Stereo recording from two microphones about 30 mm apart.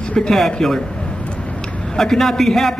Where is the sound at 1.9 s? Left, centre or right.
Centre.